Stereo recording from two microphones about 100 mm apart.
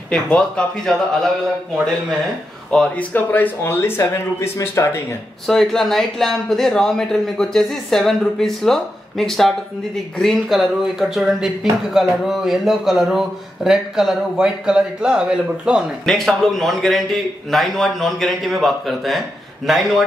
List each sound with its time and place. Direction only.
0.1 s speech: 10° left (ahead or behind)
2.7 s a man's voice: 5° left (ahead or behind)
3.1 s speech: 20° left (ahead or behind)
5.5 s a man's voice: 5° left (ahead or behind)